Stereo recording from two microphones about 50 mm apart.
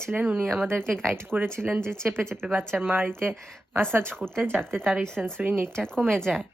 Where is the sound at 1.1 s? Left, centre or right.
Right.